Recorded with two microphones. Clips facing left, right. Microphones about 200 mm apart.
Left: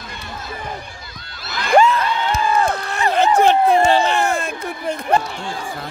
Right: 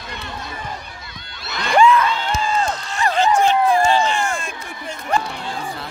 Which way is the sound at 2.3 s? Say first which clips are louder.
Left 3 dB; 60° left (ahead or behind).